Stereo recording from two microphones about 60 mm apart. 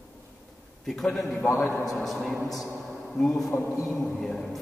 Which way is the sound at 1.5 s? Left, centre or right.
Left.